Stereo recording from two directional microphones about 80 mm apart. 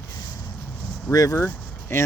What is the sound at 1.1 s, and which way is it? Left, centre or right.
Speech, left.